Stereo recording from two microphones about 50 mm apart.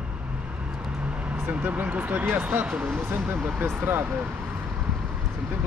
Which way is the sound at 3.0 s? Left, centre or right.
Right.